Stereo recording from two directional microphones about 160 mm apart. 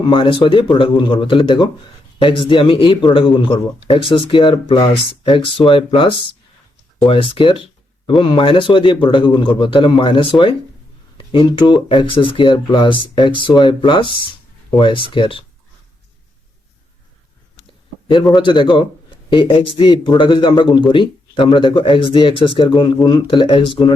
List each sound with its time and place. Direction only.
0.0 s speech: 30° left (ahead or behind)
18.3 s speech: 30° left (ahead or behind)